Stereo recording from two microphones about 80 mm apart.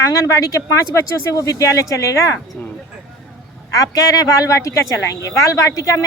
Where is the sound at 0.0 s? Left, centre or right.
Left.